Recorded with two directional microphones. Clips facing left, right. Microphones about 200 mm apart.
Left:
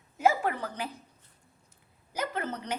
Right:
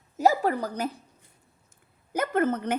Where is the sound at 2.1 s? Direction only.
50° right (ahead or behind).